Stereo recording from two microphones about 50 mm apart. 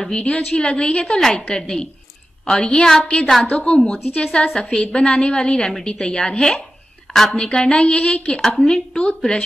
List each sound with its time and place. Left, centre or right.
0.1 s a woman's voice: left
7.1 s a sound: centre
7.3 s a woman's voice: centre
8.4 s a woman's voice: centre